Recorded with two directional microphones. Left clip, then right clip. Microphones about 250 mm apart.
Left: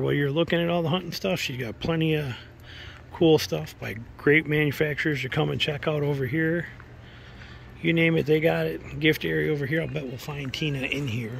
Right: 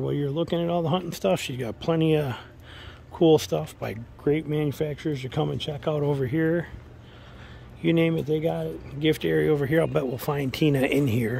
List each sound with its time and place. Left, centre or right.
0.0 s speech: centre
7.8 s speech: centre
10.7 s speech: right
11.1 s speech: centre